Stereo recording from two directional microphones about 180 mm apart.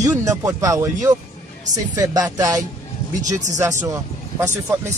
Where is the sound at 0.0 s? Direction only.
20° right (ahead or behind).